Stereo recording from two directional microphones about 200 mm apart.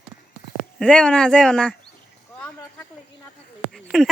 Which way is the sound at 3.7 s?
Centre (ahead or behind).